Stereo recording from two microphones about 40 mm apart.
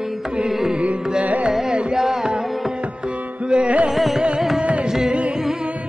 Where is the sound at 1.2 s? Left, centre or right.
Right.